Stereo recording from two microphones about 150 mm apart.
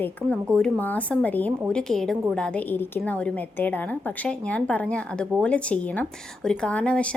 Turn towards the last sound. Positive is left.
turn(degrees=10)  # may be behind; listen again after turning